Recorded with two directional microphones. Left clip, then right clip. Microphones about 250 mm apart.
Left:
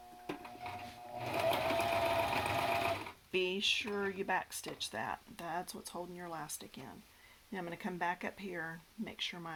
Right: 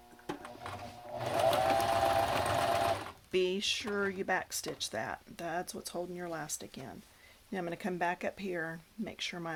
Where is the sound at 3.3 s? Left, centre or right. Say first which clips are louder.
Right 2 dB; right.